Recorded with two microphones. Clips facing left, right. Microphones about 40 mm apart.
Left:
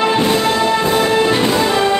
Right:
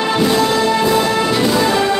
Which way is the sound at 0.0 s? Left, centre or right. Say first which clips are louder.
Even; left.